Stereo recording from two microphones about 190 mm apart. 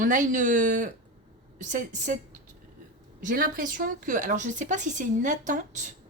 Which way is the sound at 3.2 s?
45° right (ahead or behind).